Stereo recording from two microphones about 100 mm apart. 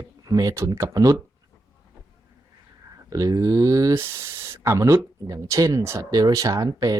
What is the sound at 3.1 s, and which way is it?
Speech, 35° right (ahead or behind).